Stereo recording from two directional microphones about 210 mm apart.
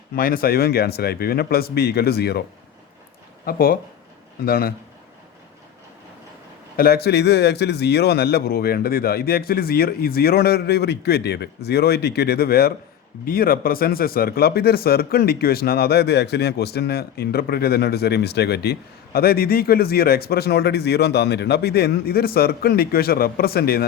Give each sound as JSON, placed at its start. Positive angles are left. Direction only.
{"t": 0.2, "sound": "speech", "side_deg": 45}
{"t": 3.4, "sound": "speech", "side_deg": 45}
{"t": 6.7, "sound": "speech", "side_deg": 45}